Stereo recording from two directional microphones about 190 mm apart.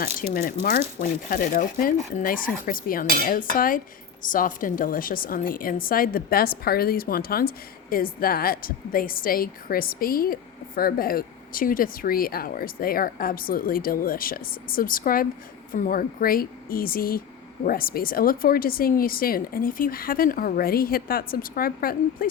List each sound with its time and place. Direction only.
0.3 s speech: 50° left (ahead or behind)